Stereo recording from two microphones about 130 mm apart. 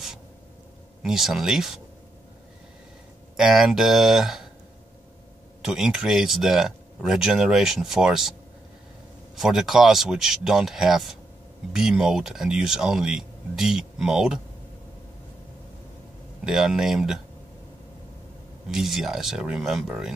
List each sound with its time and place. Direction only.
1.0 s speech: 5° right (ahead or behind)
3.3 s speech: 5° right (ahead or behind)
5.6 s speech: 5° right (ahead or behind)
16.4 s speech: 5° right (ahead or behind)
18.7 s speech: 5° right (ahead or behind)